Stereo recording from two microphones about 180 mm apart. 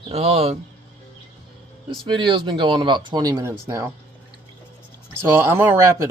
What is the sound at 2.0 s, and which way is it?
Speech, 25° right (ahead or behind).